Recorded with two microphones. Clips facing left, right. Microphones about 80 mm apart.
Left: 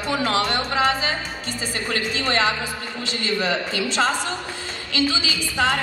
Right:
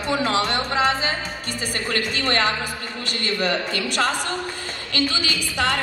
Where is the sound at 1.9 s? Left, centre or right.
Right.